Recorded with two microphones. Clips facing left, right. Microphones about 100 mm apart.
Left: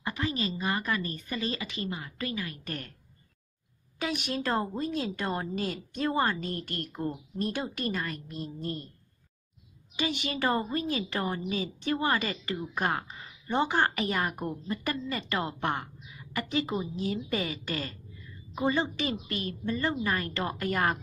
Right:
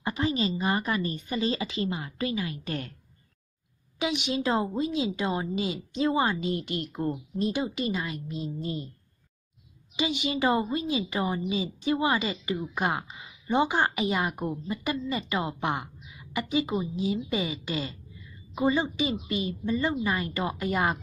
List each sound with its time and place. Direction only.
0.0 s a woman's voice: 25° right (ahead or behind)
4.0 s a woman's voice: 15° right (ahead or behind)
9.9 s a woman's voice: 15° right (ahead or behind)